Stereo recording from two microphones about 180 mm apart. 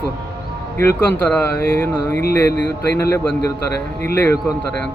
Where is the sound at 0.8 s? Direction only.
10° left (ahead or behind).